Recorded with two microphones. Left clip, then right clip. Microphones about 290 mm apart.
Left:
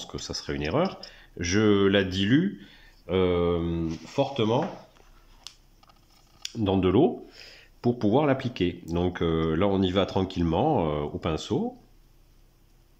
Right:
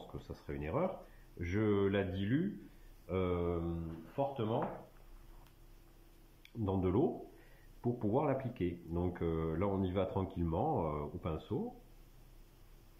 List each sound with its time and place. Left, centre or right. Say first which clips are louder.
0.0 s speech: left 14 dB; left
6.6 s speech: left 12 dB; left